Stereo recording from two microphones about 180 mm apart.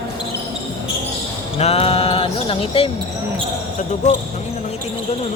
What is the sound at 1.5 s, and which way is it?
Music, 35° left (ahead or behind).